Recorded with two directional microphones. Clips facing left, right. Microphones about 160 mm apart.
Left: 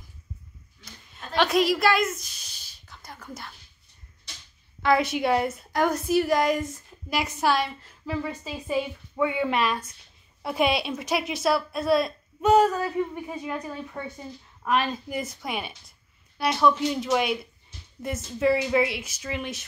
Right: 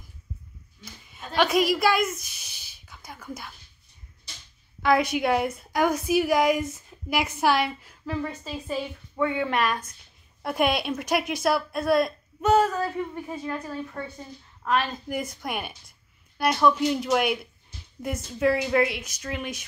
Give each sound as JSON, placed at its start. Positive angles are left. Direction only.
{"t": 1.1, "sound": "a sound", "side_deg": -5}
{"t": 4.8, "sound": "a woman's voice", "side_deg": 0}
{"t": 8.1, "sound": "a woman's voice", "side_deg": 5}
{"t": 12.5, "sound": "a woman's voice", "side_deg": 15}
{"t": 15.0, "sound": "a woman's voice", "side_deg": 0}